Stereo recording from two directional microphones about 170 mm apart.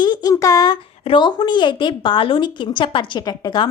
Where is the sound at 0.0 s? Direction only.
25° left (ahead or behind).